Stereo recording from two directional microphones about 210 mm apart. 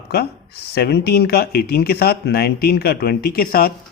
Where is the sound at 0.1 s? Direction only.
50° left (ahead or behind).